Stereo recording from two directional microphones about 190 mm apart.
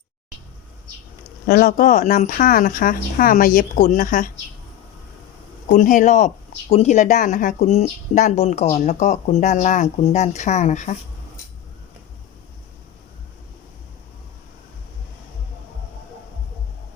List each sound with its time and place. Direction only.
1.5 s speech: 45° left (ahead or behind)
5.7 s speech: 40° left (ahead or behind)